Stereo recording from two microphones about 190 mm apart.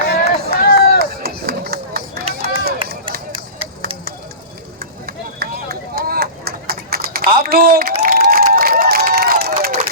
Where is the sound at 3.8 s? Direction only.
55° right (ahead or behind).